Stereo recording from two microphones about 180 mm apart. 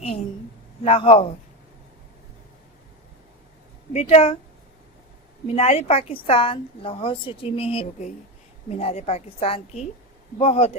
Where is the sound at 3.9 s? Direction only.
35° left (ahead or behind).